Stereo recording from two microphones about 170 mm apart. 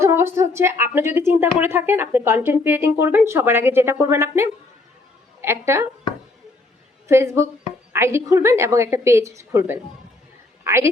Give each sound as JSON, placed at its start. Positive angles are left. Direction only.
{"t": 0.0, "sound": "a woman's voice", "side_deg": -15}
{"t": 7.1, "sound": "a woman's voice", "side_deg": -15}
{"t": 10.6, "sound": "a sound", "side_deg": -15}